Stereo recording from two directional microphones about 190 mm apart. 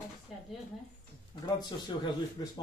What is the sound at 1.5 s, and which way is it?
Speech, 20° left (ahead or behind).